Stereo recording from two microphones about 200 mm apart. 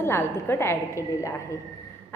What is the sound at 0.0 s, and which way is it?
A woman's voice, 10° left (ahead or behind).